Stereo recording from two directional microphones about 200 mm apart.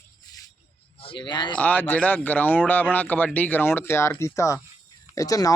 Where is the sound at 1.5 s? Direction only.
10° left (ahead or behind).